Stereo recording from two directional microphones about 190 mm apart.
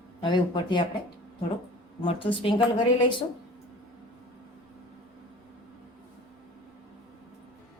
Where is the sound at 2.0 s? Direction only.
25° left (ahead or behind).